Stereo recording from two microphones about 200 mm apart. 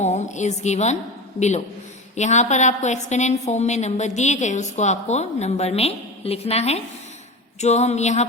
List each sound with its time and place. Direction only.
0.0 s a woman's voice: 35° left (ahead or behind)